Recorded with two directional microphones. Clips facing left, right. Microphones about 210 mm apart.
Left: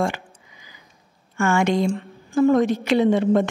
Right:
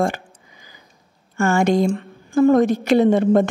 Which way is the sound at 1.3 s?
40° right (ahead or behind).